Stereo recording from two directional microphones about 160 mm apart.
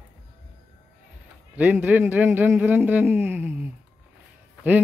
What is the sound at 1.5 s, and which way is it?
Speech, 10° right (ahead or behind).